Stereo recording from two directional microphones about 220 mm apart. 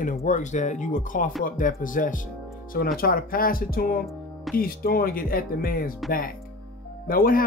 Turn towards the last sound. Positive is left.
turn(degrees=40)  # may be behind; listen again after turning